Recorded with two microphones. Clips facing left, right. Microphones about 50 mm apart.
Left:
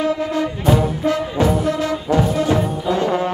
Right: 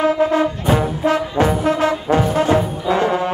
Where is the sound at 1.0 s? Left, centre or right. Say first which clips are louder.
Right 1 dB; right.